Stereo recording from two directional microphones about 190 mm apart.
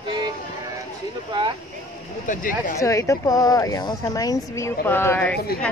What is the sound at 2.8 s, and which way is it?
Speech, 15° left (ahead or behind).